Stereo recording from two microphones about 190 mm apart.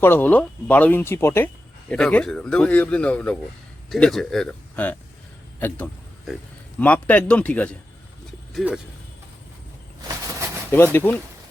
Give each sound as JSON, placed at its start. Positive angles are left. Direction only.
{"t": 0.0, "sound": "a man's voice", "side_deg": 10}
{"t": 5.5, "sound": "a sound", "side_deg": 10}
{"t": 6.7, "sound": "speech", "side_deg": 10}
{"t": 8.5, "sound": "a man's voice", "side_deg": -5}
{"t": 10.2, "sound": "a sound", "side_deg": -15}
{"t": 10.7, "sound": "speech", "side_deg": 10}